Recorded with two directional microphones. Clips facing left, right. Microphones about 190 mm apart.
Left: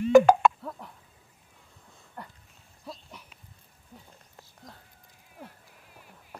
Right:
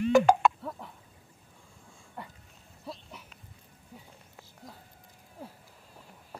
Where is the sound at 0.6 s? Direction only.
Centre (ahead or behind).